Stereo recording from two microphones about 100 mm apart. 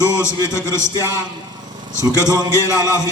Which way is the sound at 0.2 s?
30° left (ahead or behind).